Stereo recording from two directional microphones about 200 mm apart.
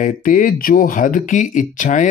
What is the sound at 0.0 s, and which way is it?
Speech, 40° left (ahead or behind).